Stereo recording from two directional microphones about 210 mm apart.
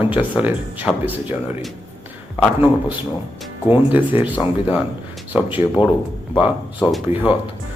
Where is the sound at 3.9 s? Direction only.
10° right (ahead or behind).